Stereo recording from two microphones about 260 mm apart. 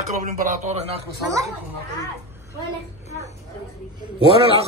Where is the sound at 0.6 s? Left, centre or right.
Right.